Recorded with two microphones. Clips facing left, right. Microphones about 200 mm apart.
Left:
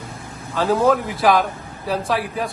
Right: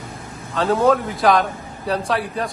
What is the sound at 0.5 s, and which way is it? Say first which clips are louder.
A man's voice: even; centre (ahead or behind).